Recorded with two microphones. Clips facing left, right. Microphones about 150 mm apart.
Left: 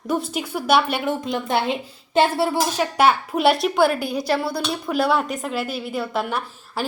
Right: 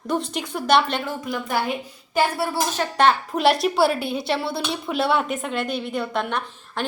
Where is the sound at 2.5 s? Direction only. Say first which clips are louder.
Left 2 dB; 10° left (ahead or behind).